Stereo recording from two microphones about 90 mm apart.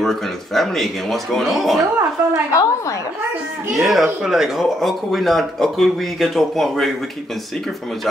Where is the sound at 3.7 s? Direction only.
Centre (ahead or behind).